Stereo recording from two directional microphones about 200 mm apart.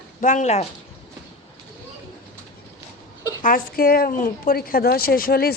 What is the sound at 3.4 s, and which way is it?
A woman's voice, 45° left (ahead or behind).